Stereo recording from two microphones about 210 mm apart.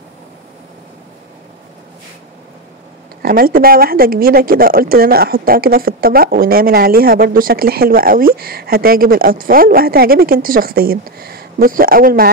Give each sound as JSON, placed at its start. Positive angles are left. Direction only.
{"t": 3.2, "sound": "speech", "side_deg": -45}